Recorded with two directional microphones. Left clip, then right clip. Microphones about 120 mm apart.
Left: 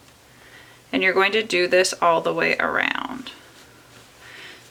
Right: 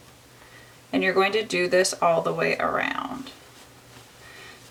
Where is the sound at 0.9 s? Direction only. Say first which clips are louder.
Left 3 dB; 20° left (ahead or behind).